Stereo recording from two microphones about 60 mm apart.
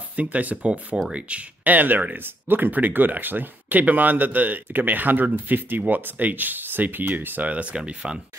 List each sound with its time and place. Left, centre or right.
0.1 s speech: right